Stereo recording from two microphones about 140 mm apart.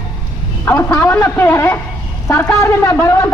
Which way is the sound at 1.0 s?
20° left (ahead or behind).